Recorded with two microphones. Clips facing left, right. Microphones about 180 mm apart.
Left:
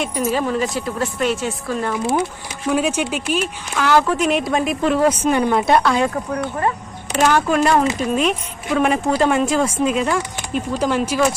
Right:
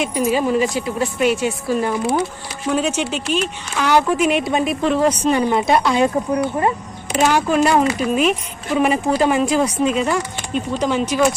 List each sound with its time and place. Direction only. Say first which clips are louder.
0.0 s a woman's voice: right 2 dB; centre (ahead or behind)
2.6 s speech: left 1 dB; 10° left (ahead or behind)
3.8 s a woman's voice: even; centre (ahead or behind)
5.9 s a woman's voice: right 3 dB; 20° right (ahead or behind); by 11.3 s 5° left (ahead or behind)